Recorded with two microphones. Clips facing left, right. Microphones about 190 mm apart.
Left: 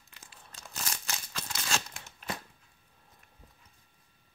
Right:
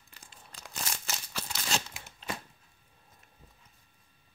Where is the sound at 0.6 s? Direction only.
10° right (ahead or behind).